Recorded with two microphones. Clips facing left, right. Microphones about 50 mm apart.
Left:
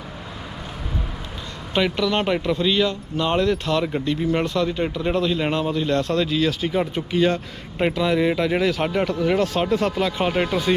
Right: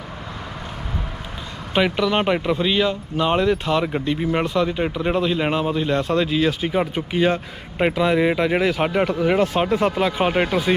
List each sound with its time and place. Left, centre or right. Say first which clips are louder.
1.7 s speech: right 2 dB; centre